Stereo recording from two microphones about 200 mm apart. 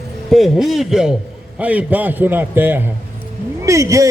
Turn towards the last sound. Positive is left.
turn(degrees=-15)  # may be behind; listen again after turning